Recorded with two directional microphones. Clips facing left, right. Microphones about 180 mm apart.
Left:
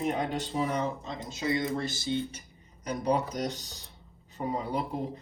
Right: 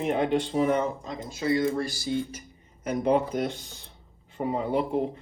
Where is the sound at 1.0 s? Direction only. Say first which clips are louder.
Right 4 dB; 25° left (ahead or behind).